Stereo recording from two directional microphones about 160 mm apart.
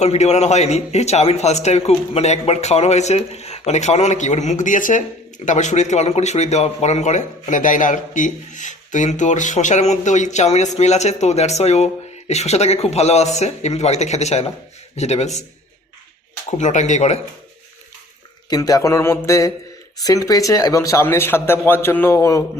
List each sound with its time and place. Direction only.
0.0 s a man's voice: 45° left (ahead or behind)
16.5 s a man's voice: 50° left (ahead or behind)
18.4 s a man's voice: 25° left (ahead or behind)